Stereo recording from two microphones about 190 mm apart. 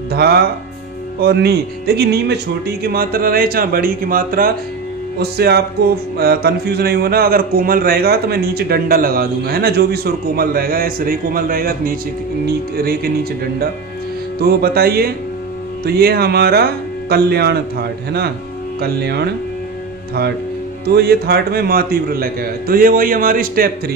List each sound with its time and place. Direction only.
0.1 s speech: 55° right (ahead or behind)
20.8 s speech: 60° right (ahead or behind)